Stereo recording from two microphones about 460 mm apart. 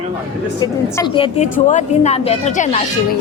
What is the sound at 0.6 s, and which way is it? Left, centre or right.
A woman's voice, centre.